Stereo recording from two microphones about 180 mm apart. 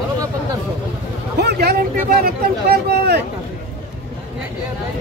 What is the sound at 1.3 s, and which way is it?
Speech, 65° right (ahead or behind).